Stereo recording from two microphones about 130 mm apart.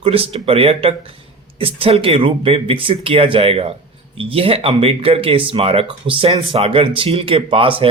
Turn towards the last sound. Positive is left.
turn(degrees=-45)  # may be behind; listen again after turning